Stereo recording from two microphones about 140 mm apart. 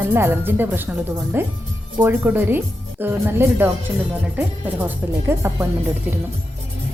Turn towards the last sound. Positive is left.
turn(degrees=-15)  # may be behind; listen again after turning